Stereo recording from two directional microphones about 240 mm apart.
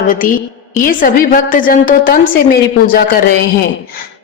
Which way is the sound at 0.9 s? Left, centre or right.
Left.